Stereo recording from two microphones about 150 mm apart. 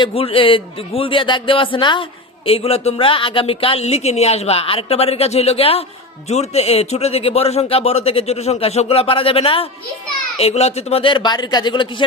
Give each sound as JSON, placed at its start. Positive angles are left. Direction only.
{"t": 0.0, "sound": "speech", "side_deg": 40}